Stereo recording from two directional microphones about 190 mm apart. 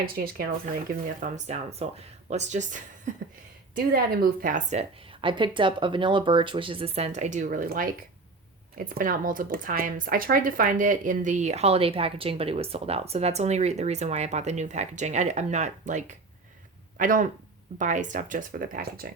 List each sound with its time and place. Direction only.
0.0 s speech: 50° right (ahead or behind)
1.2 s speech: 35° right (ahead or behind); by 19.1 s 50° right (ahead or behind)